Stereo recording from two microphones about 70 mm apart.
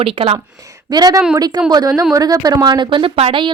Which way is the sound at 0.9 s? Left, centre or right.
Right.